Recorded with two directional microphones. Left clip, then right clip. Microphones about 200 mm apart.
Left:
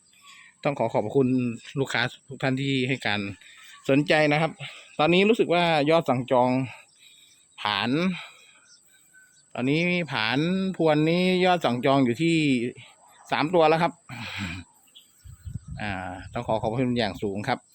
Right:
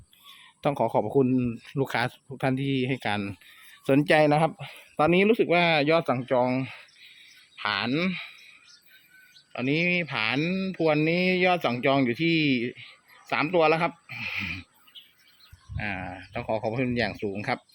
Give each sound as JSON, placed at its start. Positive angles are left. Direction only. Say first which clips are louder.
{"t": 0.3, "sound": "speech", "louder": "even", "side_deg": 0}
{"t": 9.5, "sound": "speech", "louder": "even", "side_deg": 15}
{"t": 15.8, "sound": "speech", "louder": "left 1 dB", "side_deg": 10}